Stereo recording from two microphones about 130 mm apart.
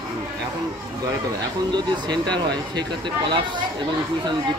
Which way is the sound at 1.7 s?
35° right (ahead or behind).